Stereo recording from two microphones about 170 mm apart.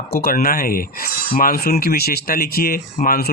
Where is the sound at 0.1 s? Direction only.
60° left (ahead or behind).